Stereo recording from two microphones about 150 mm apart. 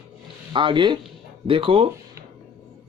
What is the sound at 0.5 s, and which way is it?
Speech, 30° right (ahead or behind).